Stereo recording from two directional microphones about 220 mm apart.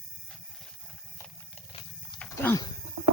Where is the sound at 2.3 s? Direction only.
10° left (ahead or behind).